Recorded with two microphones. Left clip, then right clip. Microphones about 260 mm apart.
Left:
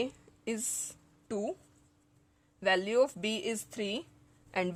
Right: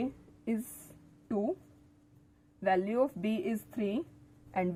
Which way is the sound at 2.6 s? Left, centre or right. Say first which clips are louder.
Left 2 dB; left.